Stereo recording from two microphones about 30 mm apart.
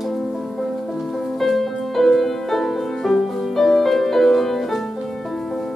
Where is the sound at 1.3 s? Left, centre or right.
Centre.